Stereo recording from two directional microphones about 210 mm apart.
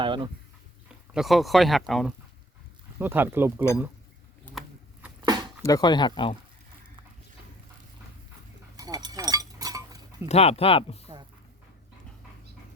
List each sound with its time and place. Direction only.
0.0 s a sound: 25° right (ahead or behind)
1.1 s speech: centre (ahead or behind)
3.0 s speech: 10° right (ahead or behind)
5.6 s speech: 20° left (ahead or behind)
8.7 s chink: 15° right (ahead or behind)
10.2 s speech: 30° left (ahead or behind)